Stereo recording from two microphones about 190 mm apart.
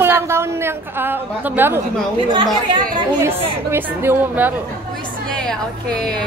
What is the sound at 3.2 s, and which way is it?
A woman's voice, 10° right (ahead or behind).